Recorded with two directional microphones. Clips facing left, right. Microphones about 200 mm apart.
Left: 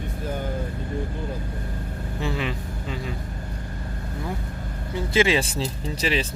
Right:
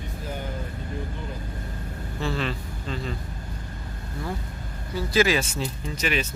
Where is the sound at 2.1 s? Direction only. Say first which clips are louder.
Even; 15° left (ahead or behind).